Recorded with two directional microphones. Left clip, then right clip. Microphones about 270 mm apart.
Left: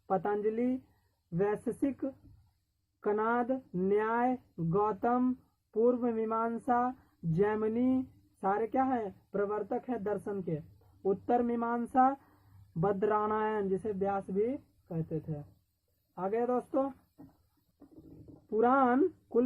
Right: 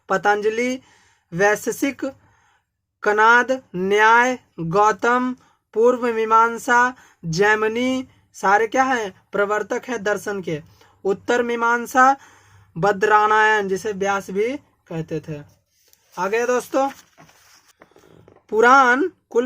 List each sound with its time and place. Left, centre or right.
0.1 s speech: centre
16.1 s speech: centre
18.5 s speech: centre